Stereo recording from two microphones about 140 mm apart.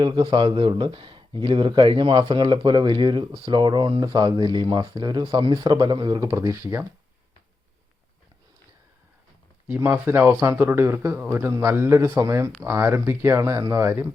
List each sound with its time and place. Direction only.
0.0 s a man's voice: 30° right (ahead or behind)
9.6 s speech: 15° right (ahead or behind)